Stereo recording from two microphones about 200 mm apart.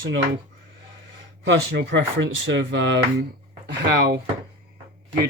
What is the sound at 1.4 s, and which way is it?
Speech, 60° right (ahead or behind).